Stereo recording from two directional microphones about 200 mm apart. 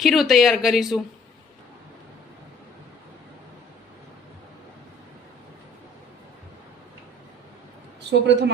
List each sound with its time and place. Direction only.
0.0 s speech: centre (ahead or behind)
8.1 s a woman's voice: 60° right (ahead or behind)